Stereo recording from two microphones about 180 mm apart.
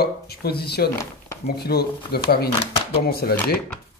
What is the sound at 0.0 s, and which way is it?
A man's voice, 60° left (ahead or behind).